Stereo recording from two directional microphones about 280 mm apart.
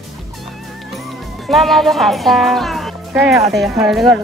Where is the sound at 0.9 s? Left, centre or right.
Centre.